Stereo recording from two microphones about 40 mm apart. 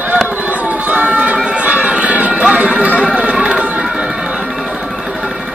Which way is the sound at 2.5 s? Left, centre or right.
Right.